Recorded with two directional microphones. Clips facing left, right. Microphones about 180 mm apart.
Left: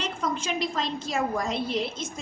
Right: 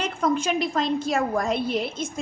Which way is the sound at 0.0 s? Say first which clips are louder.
Right 6 dB; 55° right (ahead or behind).